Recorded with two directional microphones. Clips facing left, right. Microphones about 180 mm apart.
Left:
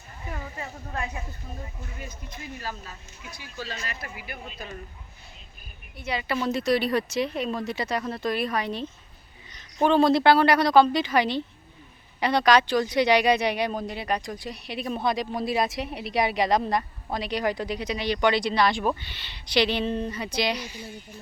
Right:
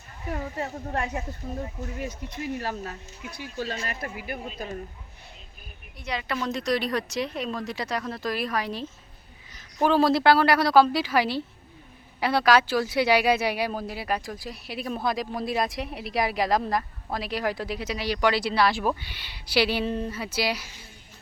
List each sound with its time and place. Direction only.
0.9 s speech: 75° right (ahead or behind)
3.3 s speech: 55° right (ahead or behind)
6.0 s speech: 5° left (ahead or behind)